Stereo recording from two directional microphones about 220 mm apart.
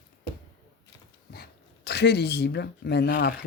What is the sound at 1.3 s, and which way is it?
Speech, 50° left (ahead or behind).